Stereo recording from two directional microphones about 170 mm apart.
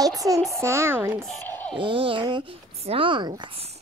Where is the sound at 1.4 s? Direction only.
10° left (ahead or behind).